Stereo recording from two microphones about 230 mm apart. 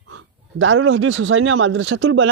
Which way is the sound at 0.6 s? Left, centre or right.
Right.